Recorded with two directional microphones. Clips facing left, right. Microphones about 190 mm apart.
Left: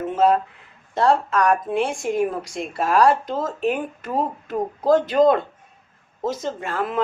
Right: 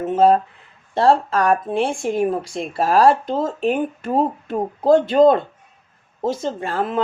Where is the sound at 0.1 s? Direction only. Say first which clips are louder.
Right 4 dB; 30° right (ahead or behind).